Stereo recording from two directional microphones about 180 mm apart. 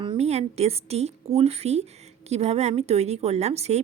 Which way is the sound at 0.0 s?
30° right (ahead or behind).